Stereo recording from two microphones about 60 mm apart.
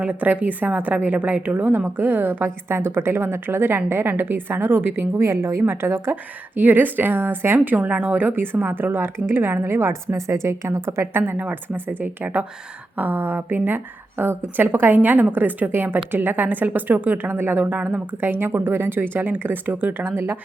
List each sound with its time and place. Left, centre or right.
0.0 s a woman's voice: right
5.1 s a woman's voice: right
6.6 s a woman's voice: right